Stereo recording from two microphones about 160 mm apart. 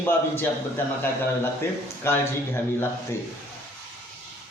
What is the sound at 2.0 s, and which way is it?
A man's voice, 15° left (ahead or behind).